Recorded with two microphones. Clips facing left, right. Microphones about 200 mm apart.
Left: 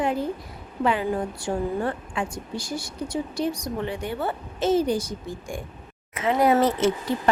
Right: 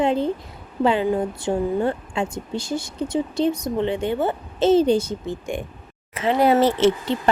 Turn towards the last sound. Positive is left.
turn(degrees=-25)  # may be behind; listen again after turning